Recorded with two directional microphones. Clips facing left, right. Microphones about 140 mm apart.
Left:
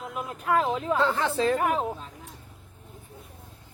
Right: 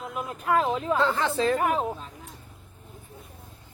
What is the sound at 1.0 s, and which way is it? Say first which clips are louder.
Speech: left 1 dB; 10° left (ahead or behind).